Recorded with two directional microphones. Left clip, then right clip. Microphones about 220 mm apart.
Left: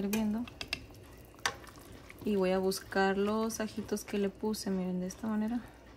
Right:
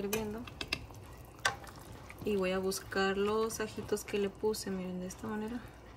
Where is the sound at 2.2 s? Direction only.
45° left (ahead or behind).